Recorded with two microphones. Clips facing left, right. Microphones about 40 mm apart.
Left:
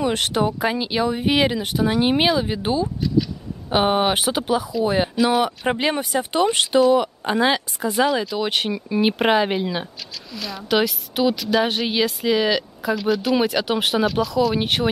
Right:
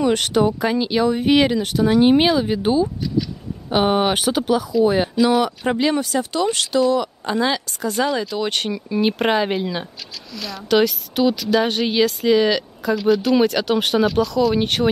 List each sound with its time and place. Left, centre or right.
0.0 s speech: centre
5.8 s speech: left
7.9 s speech: centre